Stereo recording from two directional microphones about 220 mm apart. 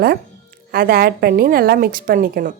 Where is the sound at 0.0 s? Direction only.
40° right (ahead or behind).